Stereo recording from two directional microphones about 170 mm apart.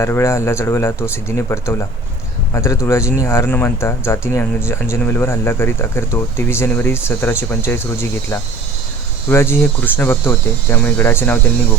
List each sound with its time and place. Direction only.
0.0 s speech: 15° left (ahead or behind)